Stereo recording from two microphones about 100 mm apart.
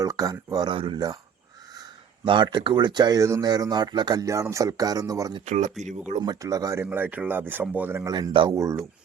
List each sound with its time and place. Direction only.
0.0 s speech: 35° right (ahead or behind)
2.2 s speech: 55° right (ahead or behind)
3.2 s speech: 30° right (ahead or behind)
3.4 s speech: 45° right (ahead or behind)
6.8 s speech: 15° right (ahead or behind)
8.0 s speech: 40° right (ahead or behind)